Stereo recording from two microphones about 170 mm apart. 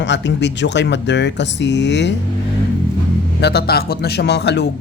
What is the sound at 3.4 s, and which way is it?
A man's voice, 70° left (ahead or behind).